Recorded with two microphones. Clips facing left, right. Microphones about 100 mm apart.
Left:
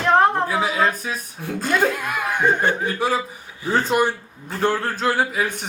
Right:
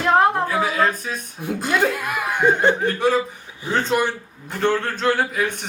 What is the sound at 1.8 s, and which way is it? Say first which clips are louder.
Speech: even; centre (ahead or behind).